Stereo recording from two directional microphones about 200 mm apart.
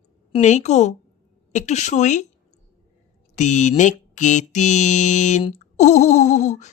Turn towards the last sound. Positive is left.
turn(degrees=35)  # may be behind; listen again after turning